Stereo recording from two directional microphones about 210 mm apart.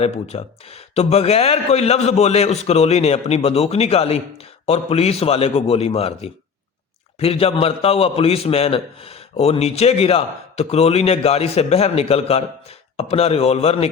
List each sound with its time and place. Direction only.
0.0 s a man's voice: 30° left (ahead or behind)